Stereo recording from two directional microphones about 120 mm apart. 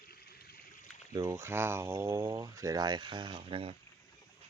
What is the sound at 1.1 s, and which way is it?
Speech, 25° right (ahead or behind).